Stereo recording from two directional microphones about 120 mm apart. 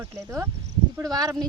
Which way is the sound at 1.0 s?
30° right (ahead or behind).